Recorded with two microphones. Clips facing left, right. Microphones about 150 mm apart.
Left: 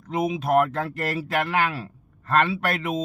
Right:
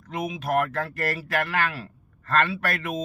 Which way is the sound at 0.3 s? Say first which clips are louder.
Left 4 dB; 20° left (ahead or behind).